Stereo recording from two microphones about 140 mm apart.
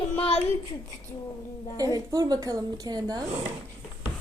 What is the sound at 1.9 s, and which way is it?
A woman's voice, 25° right (ahead or behind).